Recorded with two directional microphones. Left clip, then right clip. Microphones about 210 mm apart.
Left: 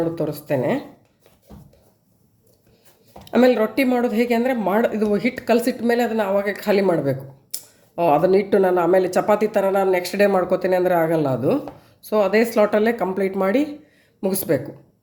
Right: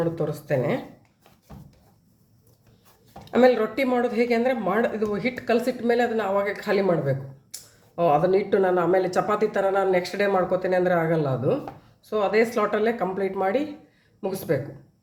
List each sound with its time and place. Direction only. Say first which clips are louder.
0.2 s speech: left 3 dB; 30° left (ahead or behind)
3.2 s speech: left 2 dB; 30° left (ahead or behind)